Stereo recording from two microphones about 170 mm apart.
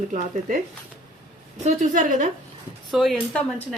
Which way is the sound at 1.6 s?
45° right (ahead or behind).